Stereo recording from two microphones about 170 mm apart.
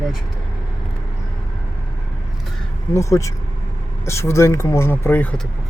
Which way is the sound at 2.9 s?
15° left (ahead or behind).